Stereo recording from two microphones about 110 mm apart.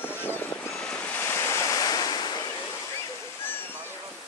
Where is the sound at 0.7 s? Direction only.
10° left (ahead or behind); by 2.4 s 40° left (ahead or behind).